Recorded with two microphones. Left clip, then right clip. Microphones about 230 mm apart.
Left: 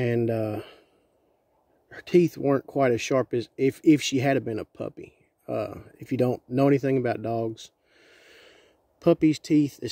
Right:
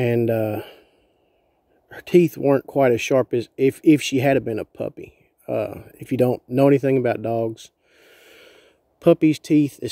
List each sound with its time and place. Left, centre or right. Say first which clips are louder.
0.0 s speech: right 6 dB; centre
1.9 s speech: right 5 dB; centre